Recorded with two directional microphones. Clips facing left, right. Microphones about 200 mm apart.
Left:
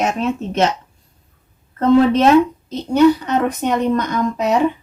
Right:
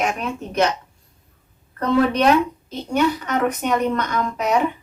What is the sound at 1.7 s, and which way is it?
Speech, 25° left (ahead or behind).